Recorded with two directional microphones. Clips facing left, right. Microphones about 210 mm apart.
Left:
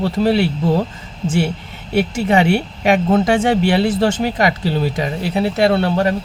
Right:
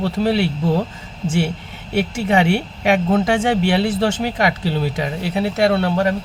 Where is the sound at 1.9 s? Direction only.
40° left (ahead or behind).